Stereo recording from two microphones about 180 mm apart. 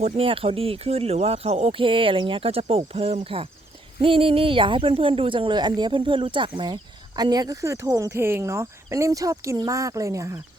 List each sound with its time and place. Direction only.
0.0 s speech: 30° right (ahead or behind)